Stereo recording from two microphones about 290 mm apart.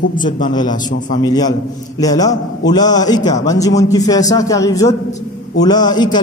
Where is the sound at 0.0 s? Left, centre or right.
Left.